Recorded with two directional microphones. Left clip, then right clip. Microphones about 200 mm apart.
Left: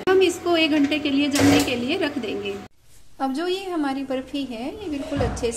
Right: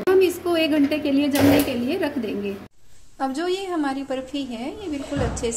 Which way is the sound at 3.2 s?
Centre (ahead or behind).